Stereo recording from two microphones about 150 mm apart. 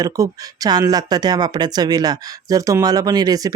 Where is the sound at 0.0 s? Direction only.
25° right (ahead or behind).